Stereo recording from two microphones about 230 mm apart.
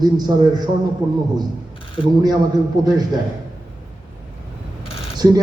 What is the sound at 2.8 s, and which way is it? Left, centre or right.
Speech, centre.